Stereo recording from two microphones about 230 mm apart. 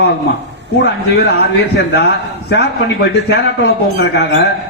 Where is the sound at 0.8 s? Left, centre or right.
Left.